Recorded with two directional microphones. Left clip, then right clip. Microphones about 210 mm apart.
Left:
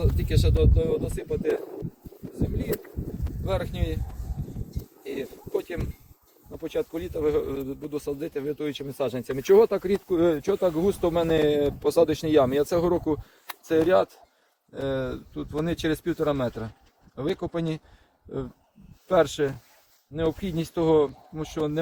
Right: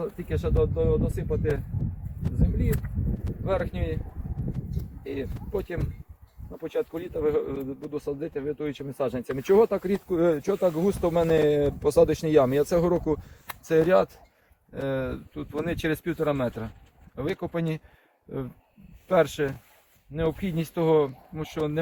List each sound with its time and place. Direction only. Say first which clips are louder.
0.0 s speech: left 2 dB; 10° right (ahead or behind)
3.4 s speech: right 1 dB; 25° right (ahead or behind)
5.0 s speech: even; 30° right (ahead or behind)
14.7 s speech: left 1 dB; 5° right (ahead or behind)